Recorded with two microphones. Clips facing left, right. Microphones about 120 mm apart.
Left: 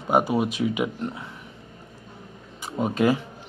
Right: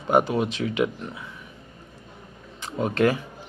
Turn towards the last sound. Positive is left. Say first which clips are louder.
# even
turn(degrees=10)  # may be behind; listen again after turning